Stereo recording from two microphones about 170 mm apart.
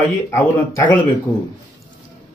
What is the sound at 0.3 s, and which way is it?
Speech, 20° left (ahead or behind).